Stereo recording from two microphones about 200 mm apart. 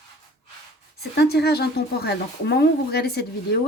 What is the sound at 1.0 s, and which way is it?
A woman's voice, 55° left (ahead or behind).